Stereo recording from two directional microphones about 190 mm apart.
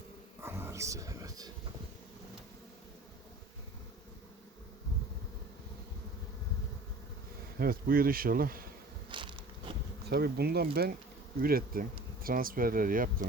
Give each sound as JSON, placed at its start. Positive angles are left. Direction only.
{"t": 0.4, "sound": "music", "side_deg": -10}
{"t": 7.6, "sound": "speech", "side_deg": -50}
{"t": 9.0, "sound": "bee", "side_deg": -25}
{"t": 10.1, "sound": "speech", "side_deg": -55}